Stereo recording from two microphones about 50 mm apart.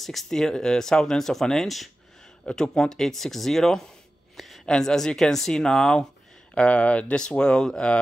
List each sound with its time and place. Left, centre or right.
0.0 s speech: centre
6.5 s speech: left